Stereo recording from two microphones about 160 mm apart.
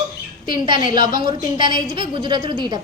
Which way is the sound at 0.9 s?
55° left (ahead or behind).